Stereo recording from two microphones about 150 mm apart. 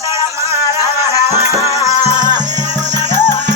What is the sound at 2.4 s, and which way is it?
Music, 50° right (ahead or behind).